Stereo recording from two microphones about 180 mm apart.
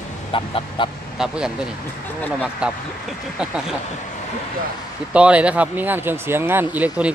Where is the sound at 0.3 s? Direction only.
30° left (ahead or behind).